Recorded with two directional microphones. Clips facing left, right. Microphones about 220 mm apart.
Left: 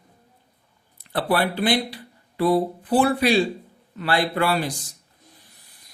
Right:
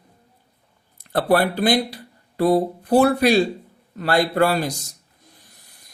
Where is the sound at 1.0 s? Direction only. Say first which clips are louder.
Right 4 dB; 45° right (ahead or behind).